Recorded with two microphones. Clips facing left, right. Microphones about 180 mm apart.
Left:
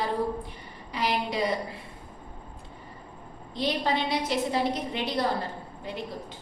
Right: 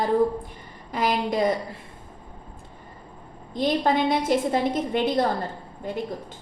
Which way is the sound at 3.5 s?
50° right (ahead or behind).